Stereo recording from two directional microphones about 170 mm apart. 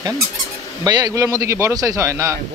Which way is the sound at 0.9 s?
25° right (ahead or behind).